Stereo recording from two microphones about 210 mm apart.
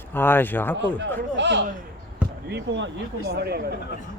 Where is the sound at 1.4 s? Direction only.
60° right (ahead or behind).